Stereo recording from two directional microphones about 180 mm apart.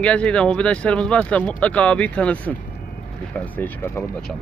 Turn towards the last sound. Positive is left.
turn(degrees=10)  # may be behind; listen again after turning